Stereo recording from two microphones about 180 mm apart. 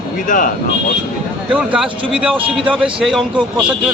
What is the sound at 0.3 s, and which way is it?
Speech, 50° left (ahead or behind).